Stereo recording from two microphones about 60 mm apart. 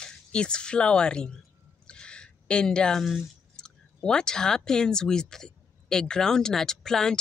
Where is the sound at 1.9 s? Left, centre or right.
Centre.